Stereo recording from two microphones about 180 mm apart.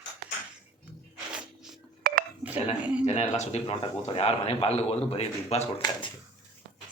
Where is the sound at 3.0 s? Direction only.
40° left (ahead or behind).